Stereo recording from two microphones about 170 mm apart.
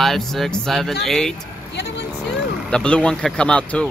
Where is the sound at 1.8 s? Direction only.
90° left.